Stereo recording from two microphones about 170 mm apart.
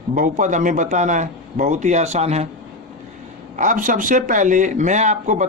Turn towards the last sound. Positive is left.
turn(degrees=-45)  # may be behind; listen again after turning